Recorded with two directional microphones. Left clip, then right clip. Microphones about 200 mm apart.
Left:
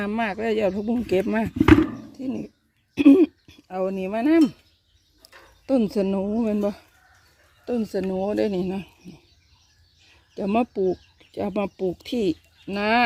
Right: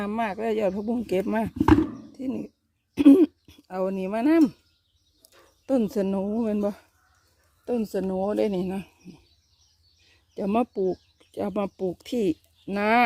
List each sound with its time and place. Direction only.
0.0 s speech: 5° right (ahead or behind)
10.3 s speech: 5° right (ahead or behind)